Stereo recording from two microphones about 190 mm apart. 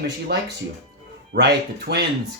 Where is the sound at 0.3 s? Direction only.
60° right (ahead or behind).